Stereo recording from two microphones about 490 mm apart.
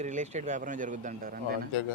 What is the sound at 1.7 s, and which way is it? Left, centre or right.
Speech, left.